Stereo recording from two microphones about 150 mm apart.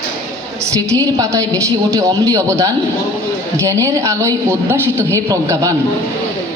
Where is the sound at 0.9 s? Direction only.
20° right (ahead or behind).